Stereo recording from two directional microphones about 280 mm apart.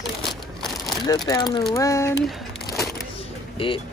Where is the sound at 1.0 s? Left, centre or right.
Centre.